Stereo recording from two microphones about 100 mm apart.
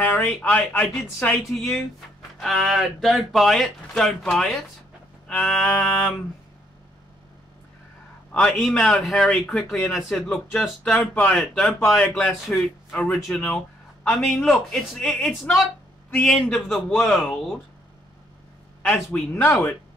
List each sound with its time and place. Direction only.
0.0 s speech: 15° left (ahead or behind)
8.3 s a man's voice: 10° left (ahead or behind)
12.0 s speech: 15° left (ahead or behind)
18.8 s speech: 10° left (ahead or behind)